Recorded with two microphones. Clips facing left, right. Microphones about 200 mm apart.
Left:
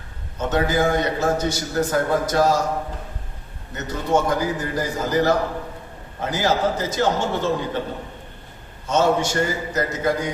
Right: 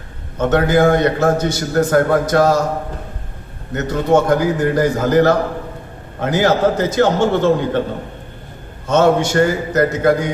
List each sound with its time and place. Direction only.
0.3 s a man's voice: 60° right (ahead or behind)
3.8 s a man's voice: 65° right (ahead or behind)
8.9 s a man's voice: 60° right (ahead or behind)